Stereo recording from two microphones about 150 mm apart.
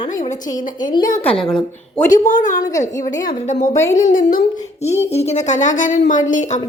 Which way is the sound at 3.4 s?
50° left (ahead or behind).